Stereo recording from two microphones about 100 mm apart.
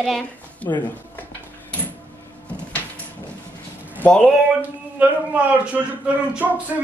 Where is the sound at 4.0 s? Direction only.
10° left (ahead or behind).